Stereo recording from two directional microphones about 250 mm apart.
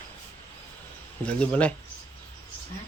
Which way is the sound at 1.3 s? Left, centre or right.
Centre.